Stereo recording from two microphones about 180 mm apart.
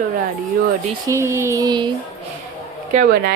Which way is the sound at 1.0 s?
15° right (ahead or behind).